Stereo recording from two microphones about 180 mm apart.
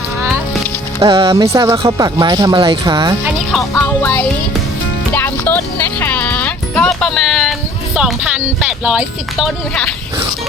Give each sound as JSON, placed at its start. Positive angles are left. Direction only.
{"t": 1.0, "sound": "speech", "side_deg": -20}
{"t": 4.0, "sound": "music", "side_deg": 10}
{"t": 7.9, "sound": "speech", "side_deg": -5}